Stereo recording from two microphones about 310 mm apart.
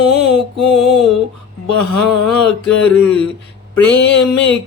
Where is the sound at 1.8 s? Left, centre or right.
Left.